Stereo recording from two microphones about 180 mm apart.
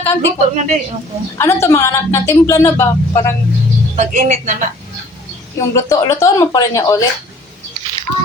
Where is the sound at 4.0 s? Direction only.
45° right (ahead or behind).